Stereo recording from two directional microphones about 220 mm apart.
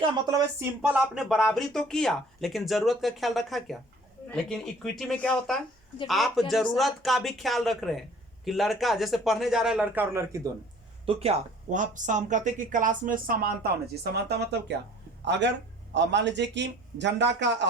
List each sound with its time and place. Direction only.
0.0 s speech: 15° right (ahead or behind)
11.0 s a man's voice: 25° right (ahead or behind); by 17.7 s 50° right (ahead or behind)